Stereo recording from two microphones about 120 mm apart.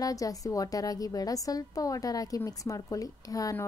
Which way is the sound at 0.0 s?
30° left (ahead or behind).